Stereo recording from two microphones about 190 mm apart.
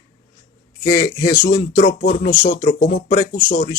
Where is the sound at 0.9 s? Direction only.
55° left (ahead or behind).